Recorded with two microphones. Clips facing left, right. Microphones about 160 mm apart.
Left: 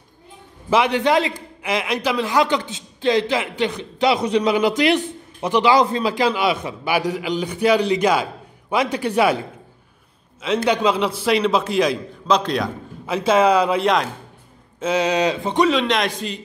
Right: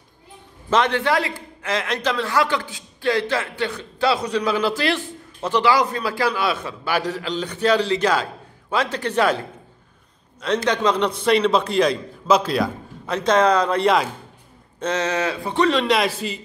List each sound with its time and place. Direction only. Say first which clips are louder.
0.7 s a man's voice: left 2 dB; 10° left (ahead or behind)
10.4 s a man's voice: left 2 dB; 5° left (ahead or behind)
14.8 s a man's voice: left 4 dB; 10° left (ahead or behind)
15.7 s a man's voice: even; centre (ahead or behind)